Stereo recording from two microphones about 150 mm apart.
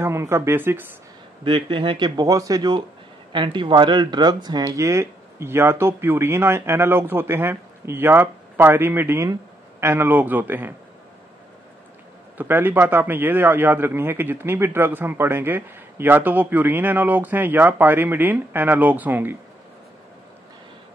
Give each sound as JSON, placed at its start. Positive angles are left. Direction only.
{"t": 0.0, "sound": "speech", "side_deg": -15}
{"t": 1.4, "sound": "speech", "side_deg": -30}
{"t": 12.4, "sound": "speech", "side_deg": -15}